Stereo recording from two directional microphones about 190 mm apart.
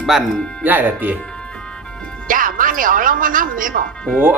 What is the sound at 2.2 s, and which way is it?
Speech, 45° right (ahead or behind).